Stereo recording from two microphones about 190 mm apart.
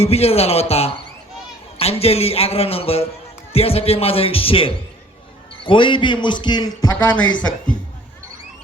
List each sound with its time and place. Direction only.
0.0 s a man's voice: 30° left (ahead or behind)